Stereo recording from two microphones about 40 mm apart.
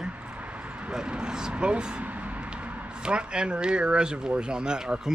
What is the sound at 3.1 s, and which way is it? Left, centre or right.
Speech, right.